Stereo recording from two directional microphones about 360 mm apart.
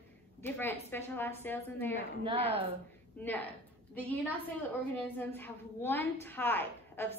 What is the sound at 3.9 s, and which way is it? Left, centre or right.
A woman's voice, centre.